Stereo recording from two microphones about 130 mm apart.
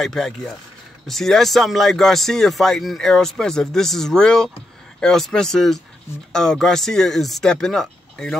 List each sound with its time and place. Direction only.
0.0 s speech: 5° left (ahead or behind)